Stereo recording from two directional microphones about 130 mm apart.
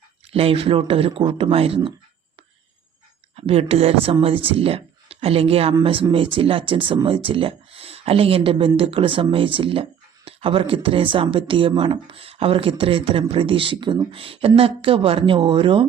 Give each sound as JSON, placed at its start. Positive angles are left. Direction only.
{"t": 0.3, "sound": "speech", "side_deg": -45}
{"t": 3.3, "sound": "speech", "side_deg": -50}